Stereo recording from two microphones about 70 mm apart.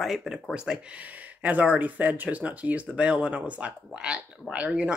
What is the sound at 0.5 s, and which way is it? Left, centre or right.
Speech, centre.